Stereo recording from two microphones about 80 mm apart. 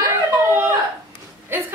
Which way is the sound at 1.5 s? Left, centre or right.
Right.